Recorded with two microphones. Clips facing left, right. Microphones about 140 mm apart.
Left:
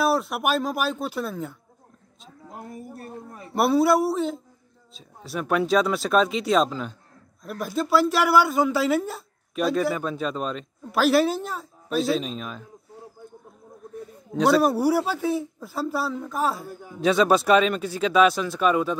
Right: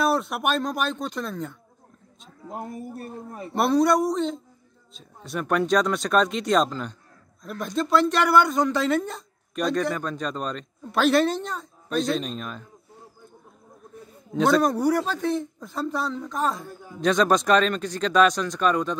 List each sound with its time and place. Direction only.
0.0 s speech: centre (ahead or behind)
2.5 s speech: 20° right (ahead or behind)
3.5 s speech: 5° left (ahead or behind)
14.3 s a man's voice: 5° left (ahead or behind)